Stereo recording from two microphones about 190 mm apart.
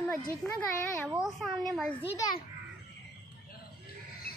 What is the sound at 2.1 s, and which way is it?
Speech, 20° left (ahead or behind).